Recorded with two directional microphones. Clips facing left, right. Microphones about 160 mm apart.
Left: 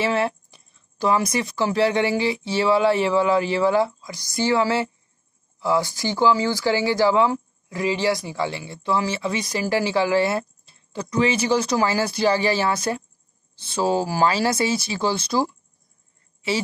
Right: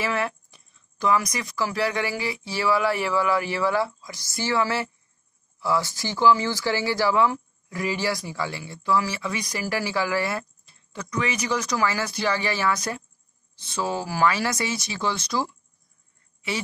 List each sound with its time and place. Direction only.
0.0 s speech: 25° left (ahead or behind)